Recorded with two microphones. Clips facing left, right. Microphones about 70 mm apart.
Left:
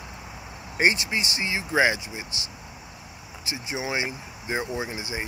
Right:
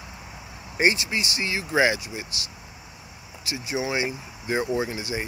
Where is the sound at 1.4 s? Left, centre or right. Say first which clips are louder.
Right 1 dB; left.